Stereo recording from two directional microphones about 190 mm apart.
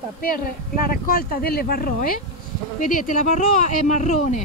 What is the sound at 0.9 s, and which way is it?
Speech, 50° left (ahead or behind).